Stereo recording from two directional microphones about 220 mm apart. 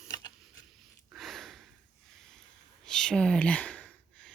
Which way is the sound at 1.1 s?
Centre (ahead or behind).